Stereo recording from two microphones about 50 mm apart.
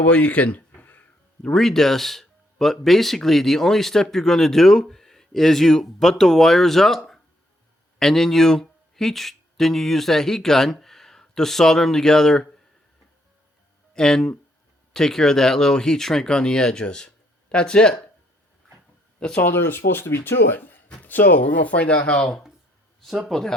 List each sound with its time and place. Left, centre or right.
0.0 s speech: left
1.4 s speech: centre
13.9 s speech: centre
19.4 s speech: left
23.3 s speech: centre